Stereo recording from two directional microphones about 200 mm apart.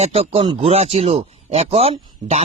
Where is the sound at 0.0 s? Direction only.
30° right (ahead or behind).